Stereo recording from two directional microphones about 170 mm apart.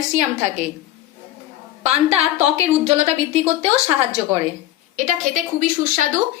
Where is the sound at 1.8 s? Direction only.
40° right (ahead or behind).